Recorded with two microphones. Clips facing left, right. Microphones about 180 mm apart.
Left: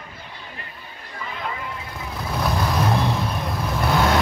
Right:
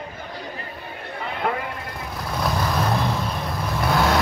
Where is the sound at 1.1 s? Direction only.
60° right (ahead or behind).